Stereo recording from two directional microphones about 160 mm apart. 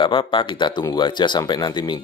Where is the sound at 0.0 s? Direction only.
30° left (ahead or behind).